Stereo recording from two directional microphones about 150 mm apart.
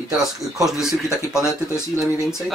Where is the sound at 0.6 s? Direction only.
5° right (ahead or behind).